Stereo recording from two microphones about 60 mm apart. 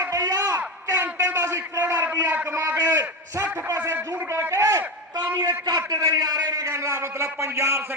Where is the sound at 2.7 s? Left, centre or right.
Right.